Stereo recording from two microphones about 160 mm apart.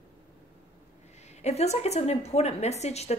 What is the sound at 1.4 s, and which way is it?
A woman's voice, 40° left (ahead or behind).